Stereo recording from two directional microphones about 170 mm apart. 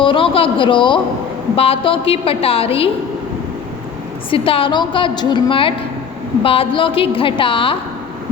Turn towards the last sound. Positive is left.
turn(degrees=30)  # may be behind; listen again after turning